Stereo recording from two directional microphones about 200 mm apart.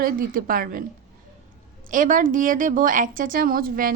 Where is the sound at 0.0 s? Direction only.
45° right (ahead or behind).